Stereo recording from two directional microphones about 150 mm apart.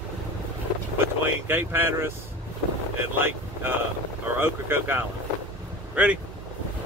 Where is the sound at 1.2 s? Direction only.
15° right (ahead or behind).